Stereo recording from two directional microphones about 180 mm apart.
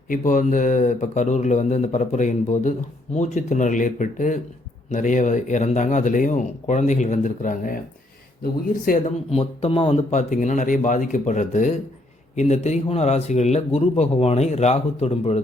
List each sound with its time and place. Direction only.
0.1 s a man's voice: 45° left (ahead or behind)
8.8 s a man's voice: 45° left (ahead or behind)
9.3 s a man's voice: 30° left (ahead or behind)